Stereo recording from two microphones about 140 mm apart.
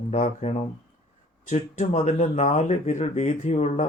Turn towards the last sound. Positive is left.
turn(degrees=55)  # may be behind; listen again after turning